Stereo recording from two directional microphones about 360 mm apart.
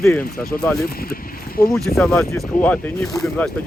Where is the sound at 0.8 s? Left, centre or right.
Left.